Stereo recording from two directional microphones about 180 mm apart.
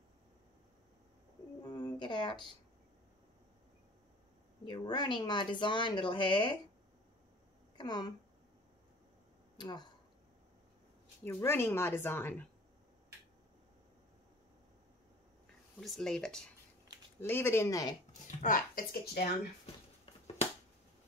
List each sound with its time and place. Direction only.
1.6 s a sound: 20° left (ahead or behind)
4.6 s speech: 25° left (ahead or behind)
7.7 s speech: 25° left (ahead or behind)
9.6 s speech: 25° left (ahead or behind)
11.2 s speech: 15° left (ahead or behind)
15.8 s speech: centre (ahead or behind); by 17.9 s 20° left (ahead or behind)
18.2 s speech: 45° left (ahead or behind)
19.6 s finger snapping: 30° left (ahead or behind)